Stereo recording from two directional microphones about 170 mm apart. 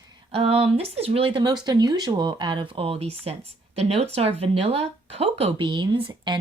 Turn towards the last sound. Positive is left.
turn(degrees=-25)  # may be behind; listen again after turning